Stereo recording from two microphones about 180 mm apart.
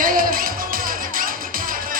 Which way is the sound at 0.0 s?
50° right (ahead or behind).